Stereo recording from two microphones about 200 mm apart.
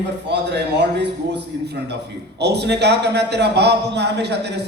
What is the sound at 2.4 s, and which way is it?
A man's voice, 55° right (ahead or behind).